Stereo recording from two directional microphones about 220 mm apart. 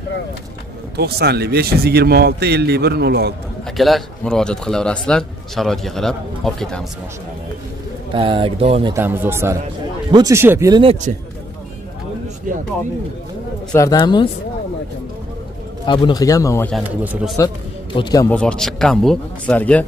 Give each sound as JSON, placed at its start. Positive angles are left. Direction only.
{"t": 0.9, "sound": "a man's voice", "side_deg": -45}
{"t": 3.6, "sound": "speech", "side_deg": 0}
{"t": 8.1, "sound": "speech", "side_deg": -25}
{"t": 8.9, "sound": "a man's voice", "side_deg": -10}
{"t": 12.5, "sound": "speech", "side_deg": -40}
{"t": 13.7, "sound": "speech", "side_deg": 15}
{"t": 15.8, "sound": "speech", "side_deg": 20}
{"t": 16.7, "sound": "speech", "side_deg": -5}
{"t": 17.9, "sound": "speech", "side_deg": 20}
{"t": 18.3, "sound": "speech", "side_deg": 5}